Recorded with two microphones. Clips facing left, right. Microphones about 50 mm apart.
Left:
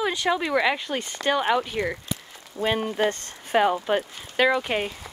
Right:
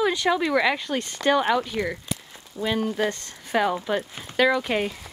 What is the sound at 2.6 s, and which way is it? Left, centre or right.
Speech, left.